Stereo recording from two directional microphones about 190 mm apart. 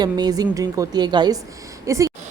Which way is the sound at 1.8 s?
15° right (ahead or behind).